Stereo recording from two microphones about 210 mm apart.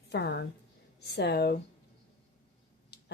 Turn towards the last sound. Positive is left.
turn(degrees=50)  # may be behind; listen again after turning